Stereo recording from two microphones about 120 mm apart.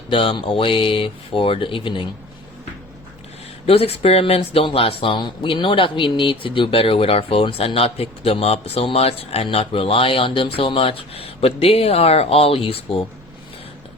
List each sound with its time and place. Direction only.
0.1 s speech: 45° left (ahead or behind)
3.7 s speech: 55° left (ahead or behind)